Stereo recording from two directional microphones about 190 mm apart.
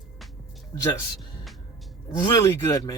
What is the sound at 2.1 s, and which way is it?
Speech, 15° left (ahead or behind).